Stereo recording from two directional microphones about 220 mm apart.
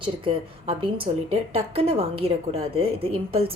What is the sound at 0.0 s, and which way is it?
Speech, 25° right (ahead or behind).